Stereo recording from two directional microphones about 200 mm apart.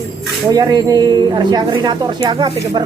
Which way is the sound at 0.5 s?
20° right (ahead or behind).